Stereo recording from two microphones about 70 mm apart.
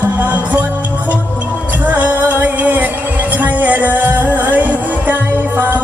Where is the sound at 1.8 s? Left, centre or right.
Right.